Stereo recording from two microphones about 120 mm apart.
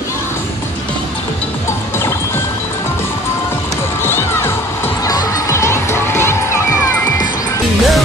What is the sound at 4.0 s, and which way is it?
Crowd, 20° left (ahead or behind).